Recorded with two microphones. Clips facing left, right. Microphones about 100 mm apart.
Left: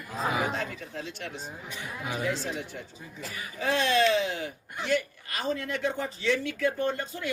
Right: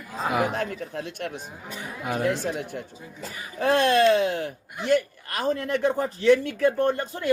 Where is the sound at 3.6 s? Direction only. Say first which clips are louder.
Right 5 dB; 55° right (ahead or behind).